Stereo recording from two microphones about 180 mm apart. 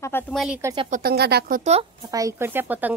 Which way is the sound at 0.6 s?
20° right (ahead or behind).